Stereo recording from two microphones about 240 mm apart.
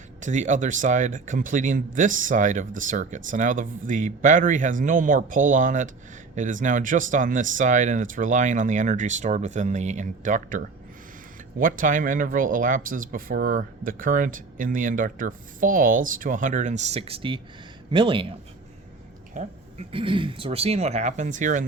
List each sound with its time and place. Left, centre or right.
0.2 s speech: right
11.6 s speech: right